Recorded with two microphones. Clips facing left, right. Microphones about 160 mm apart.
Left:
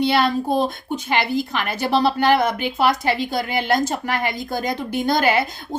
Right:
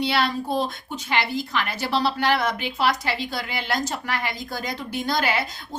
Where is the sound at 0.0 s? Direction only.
50° left (ahead or behind).